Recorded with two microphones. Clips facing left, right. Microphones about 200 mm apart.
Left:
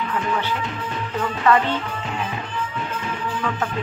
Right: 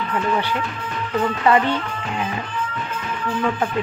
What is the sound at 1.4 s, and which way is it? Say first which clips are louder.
Speech: even; 15° right (ahead or behind).